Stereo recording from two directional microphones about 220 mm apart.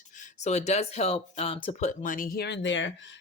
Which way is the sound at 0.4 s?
30° left (ahead or behind).